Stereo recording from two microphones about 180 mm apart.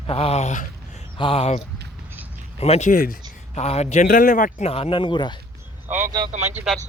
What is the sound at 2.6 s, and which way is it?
Speech, 40° left (ahead or behind).